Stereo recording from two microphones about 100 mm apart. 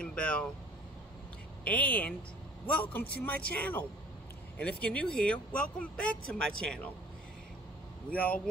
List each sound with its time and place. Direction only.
0.0 s a sound: 10° left (ahead or behind)
1.6 s speech: 15° left (ahead or behind)
8.1 s speech: 15° left (ahead or behind)